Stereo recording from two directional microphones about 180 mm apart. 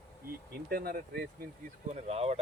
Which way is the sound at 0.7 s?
55° right (ahead or behind).